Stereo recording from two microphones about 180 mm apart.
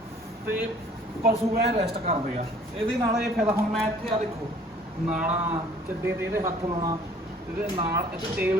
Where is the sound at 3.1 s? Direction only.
15° right (ahead or behind).